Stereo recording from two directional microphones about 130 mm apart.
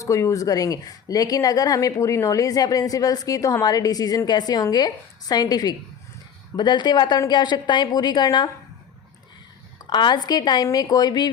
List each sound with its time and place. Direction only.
0.0 s a woman's voice: 25° left (ahead or behind)
9.8 s a woman's voice: 35° left (ahead or behind)